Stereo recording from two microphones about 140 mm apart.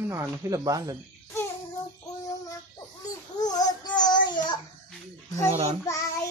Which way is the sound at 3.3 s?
30° left (ahead or behind).